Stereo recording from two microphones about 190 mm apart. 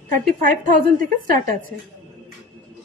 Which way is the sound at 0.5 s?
45° right (ahead or behind).